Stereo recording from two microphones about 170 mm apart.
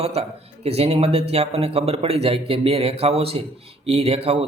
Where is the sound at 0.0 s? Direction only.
35° right (ahead or behind).